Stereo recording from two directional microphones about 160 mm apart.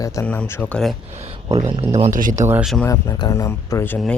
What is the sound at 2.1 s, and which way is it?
Speech, 55° right (ahead or behind).